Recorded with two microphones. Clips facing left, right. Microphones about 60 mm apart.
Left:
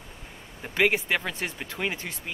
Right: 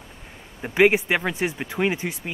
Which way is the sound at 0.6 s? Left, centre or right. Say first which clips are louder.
Right 6 dB; centre.